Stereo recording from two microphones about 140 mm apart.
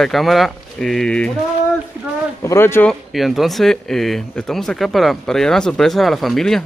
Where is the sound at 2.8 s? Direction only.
Centre (ahead or behind).